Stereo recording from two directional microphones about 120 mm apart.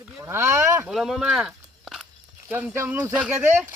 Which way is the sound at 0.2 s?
20° right (ahead or behind).